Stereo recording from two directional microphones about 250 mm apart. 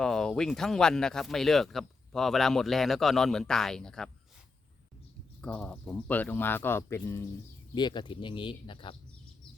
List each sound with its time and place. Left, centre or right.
0.0 s speech: centre
5.4 s speech: centre